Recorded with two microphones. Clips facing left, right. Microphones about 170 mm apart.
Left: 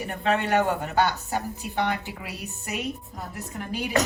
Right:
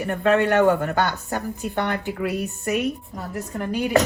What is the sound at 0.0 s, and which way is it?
Speech, 65° right (ahead or behind).